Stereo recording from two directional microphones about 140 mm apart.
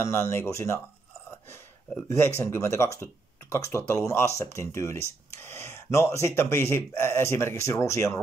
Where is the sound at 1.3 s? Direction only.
20° left (ahead or behind).